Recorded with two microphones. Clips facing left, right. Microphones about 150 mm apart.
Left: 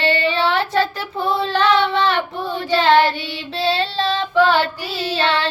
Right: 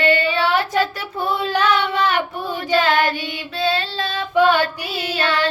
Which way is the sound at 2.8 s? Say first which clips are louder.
Left 4 dB; 30° left (ahead or behind).